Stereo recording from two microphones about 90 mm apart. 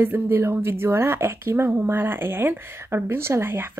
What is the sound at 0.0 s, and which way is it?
A woman's voice, 25° right (ahead or behind).